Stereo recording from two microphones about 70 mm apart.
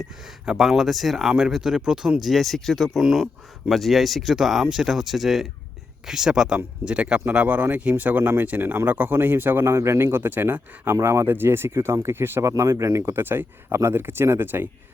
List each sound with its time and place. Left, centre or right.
0.0 s speech: centre; by 14.7 s right